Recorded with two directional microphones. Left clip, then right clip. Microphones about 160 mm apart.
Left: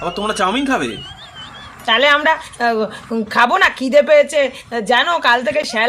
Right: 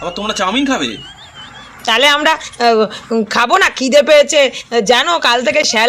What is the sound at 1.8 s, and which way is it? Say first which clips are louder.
Speech: right 2 dB; 35° right (ahead or behind).